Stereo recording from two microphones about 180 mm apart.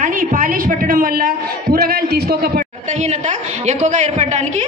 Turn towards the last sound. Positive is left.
turn(degrees=-40)  # may be behind; listen again after turning